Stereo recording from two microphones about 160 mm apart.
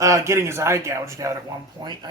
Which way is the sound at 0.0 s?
20° right (ahead or behind).